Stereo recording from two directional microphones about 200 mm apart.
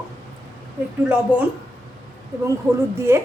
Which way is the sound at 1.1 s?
5° right (ahead or behind).